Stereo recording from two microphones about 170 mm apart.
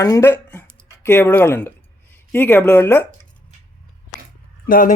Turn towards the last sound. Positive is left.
turn(degrees=55)  # may be behind; listen again after turning